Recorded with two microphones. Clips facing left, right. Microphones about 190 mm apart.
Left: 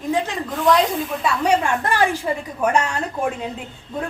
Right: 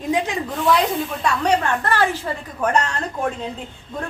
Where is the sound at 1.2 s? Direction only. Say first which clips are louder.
Even; 10° left (ahead or behind).